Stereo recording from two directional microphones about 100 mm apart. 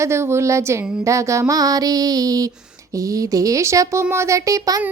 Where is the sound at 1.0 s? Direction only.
30° right (ahead or behind).